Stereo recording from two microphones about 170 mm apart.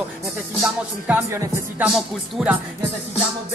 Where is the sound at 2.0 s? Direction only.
5° right (ahead or behind).